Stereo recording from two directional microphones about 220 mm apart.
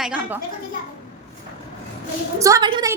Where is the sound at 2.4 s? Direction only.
15° right (ahead or behind).